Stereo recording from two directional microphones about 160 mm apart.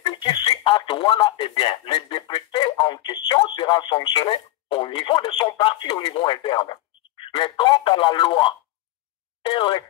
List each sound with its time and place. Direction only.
0.0 s speech: 30° left (ahead or behind)